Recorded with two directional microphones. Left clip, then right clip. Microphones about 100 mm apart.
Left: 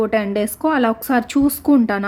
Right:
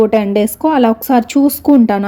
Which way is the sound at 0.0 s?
25° right (ahead or behind).